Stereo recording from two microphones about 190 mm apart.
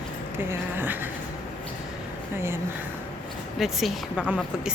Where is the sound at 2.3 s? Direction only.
10° right (ahead or behind).